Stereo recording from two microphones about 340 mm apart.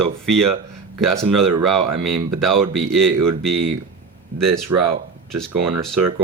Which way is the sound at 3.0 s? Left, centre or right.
Right.